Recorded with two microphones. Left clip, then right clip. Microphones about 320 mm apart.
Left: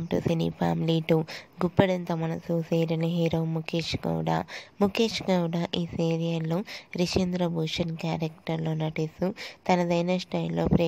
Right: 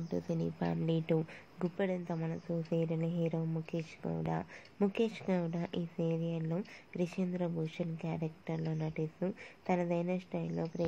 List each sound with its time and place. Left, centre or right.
0.1 s speech: left